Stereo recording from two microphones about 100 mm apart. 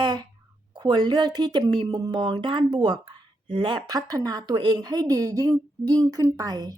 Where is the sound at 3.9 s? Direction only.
40° right (ahead or behind).